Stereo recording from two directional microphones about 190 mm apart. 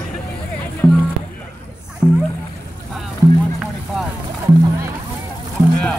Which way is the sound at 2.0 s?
5° right (ahead or behind).